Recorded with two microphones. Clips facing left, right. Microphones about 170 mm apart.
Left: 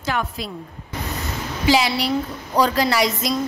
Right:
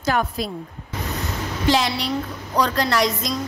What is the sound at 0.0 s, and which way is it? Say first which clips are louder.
Speech: right 3 dB; 40° right (ahead or behind).